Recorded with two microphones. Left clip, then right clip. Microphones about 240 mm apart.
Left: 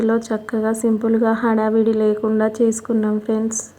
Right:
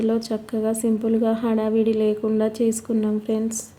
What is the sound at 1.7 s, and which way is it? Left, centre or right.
Speech, centre.